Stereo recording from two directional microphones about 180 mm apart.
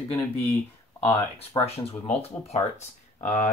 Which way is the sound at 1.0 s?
15° left (ahead or behind).